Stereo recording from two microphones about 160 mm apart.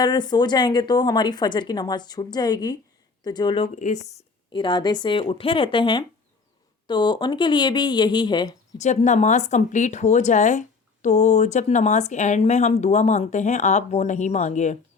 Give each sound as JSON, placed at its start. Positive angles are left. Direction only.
{"t": 0.0, "sound": "a woman's voice", "side_deg": 25}
{"t": 8.8, "sound": "speech", "side_deg": 45}